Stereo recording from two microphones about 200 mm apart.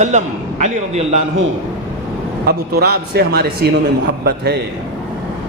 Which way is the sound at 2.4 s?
50° right (ahead or behind).